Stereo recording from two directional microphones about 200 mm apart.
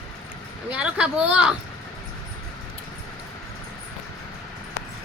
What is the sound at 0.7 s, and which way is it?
Speech, 5° right (ahead or behind).